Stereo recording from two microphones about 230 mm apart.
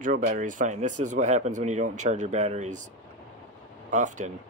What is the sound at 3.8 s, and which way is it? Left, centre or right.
Speech, right.